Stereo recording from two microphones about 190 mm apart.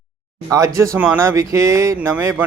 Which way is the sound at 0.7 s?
10° right (ahead or behind).